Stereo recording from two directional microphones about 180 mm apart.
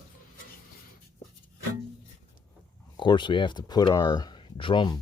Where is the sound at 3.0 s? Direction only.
25° left (ahead or behind).